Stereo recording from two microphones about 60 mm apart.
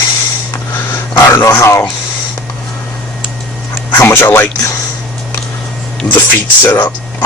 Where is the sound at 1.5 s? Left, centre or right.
Left.